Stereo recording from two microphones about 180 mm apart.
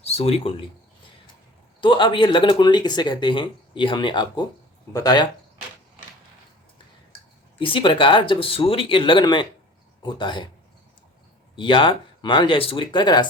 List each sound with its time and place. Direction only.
0.0 s speech: 35° left (ahead or behind)
1.8 s speech: 25° left (ahead or behind)
7.6 s speech: 30° left (ahead or behind)
11.5 s speech: 25° left (ahead or behind)